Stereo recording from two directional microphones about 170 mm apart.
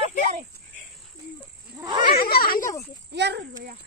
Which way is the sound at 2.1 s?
65° left (ahead or behind).